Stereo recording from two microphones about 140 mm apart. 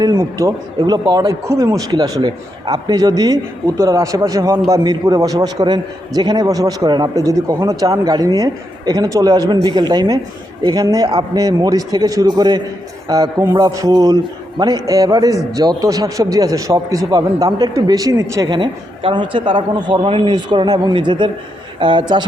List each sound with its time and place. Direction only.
0.0 s a man's voice: 25° right (ahead or behind)